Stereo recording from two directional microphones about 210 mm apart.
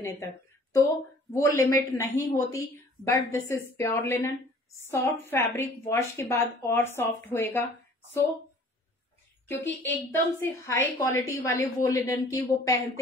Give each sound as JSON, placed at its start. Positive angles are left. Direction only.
{"t": 0.0, "sound": "a woman's voice", "side_deg": 15}
{"t": 1.3, "sound": "a woman's voice", "side_deg": 15}
{"t": 9.5, "sound": "a woman's voice", "side_deg": 10}